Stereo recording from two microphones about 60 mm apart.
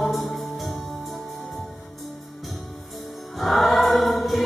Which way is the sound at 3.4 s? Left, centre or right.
Centre.